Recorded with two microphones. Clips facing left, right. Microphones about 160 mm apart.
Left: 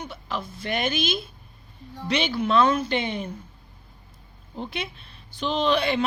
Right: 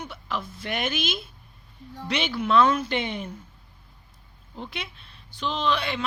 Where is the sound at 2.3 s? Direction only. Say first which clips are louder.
Right 1 dB; 30° left (ahead or behind).